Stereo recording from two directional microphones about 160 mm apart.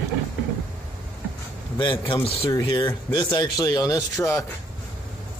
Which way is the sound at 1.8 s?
30° left (ahead or behind).